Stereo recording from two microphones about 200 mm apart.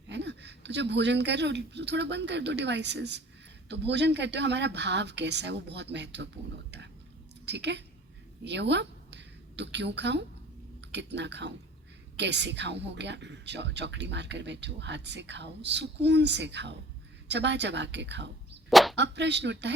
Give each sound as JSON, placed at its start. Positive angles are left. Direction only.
{"t": 0.1, "sound": "a woman's voice", "side_deg": -60}
{"t": 18.7, "sound": "a sound", "side_deg": 0}
{"t": 18.9, "sound": "speech", "side_deg": -60}